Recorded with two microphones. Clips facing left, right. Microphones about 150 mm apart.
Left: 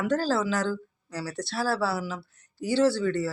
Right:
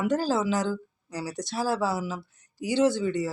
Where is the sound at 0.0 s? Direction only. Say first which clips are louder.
Even; 15° right (ahead or behind).